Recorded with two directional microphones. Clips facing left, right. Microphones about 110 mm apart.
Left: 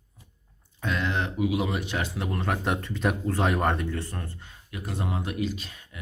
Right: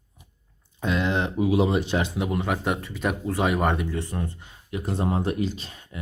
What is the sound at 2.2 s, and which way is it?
Speech, 10° right (ahead or behind).